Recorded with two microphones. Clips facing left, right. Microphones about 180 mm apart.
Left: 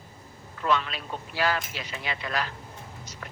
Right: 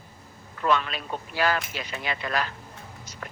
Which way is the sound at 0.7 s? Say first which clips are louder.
Right 2 dB; 50° right (ahead or behind).